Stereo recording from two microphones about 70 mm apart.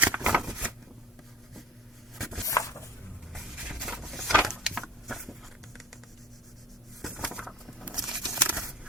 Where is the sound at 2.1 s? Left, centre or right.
Centre.